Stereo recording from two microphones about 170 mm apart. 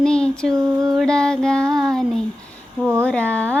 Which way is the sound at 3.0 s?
10° left (ahead or behind).